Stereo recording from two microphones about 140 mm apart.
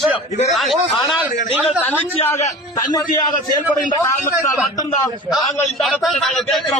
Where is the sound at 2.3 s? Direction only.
25° left (ahead or behind).